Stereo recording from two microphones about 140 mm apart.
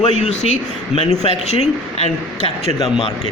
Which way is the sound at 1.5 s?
50° left (ahead or behind).